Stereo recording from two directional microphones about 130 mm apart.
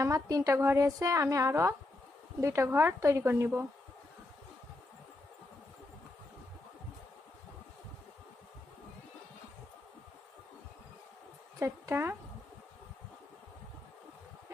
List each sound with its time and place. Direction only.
0.0 s a woman's voice: 25° right (ahead or behind)
11.6 s a woman's voice: 20° right (ahead or behind)